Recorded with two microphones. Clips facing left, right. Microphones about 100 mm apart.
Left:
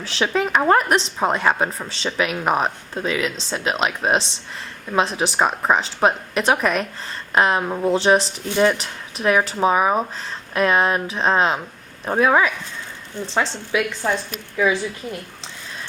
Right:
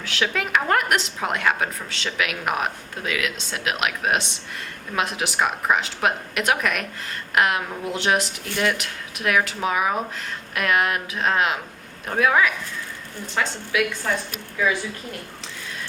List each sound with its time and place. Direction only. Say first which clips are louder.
0.0 s a woman's voice: left 4 dB; 30° left (ahead or behind)